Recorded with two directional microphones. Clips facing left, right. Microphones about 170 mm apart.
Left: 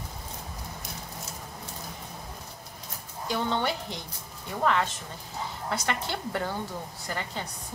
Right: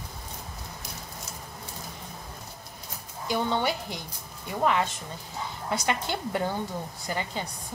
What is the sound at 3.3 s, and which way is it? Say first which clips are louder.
A woman's voice: right 2 dB; 10° right (ahead or behind).